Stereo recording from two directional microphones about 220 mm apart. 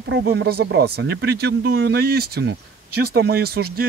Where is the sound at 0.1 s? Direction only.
50° right (ahead or behind).